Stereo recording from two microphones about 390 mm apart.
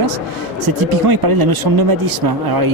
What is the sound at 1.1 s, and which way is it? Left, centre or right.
Speech, right.